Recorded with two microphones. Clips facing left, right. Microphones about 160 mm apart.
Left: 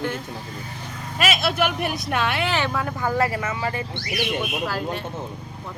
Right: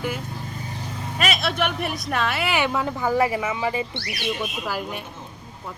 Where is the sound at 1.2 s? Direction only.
Centre (ahead or behind).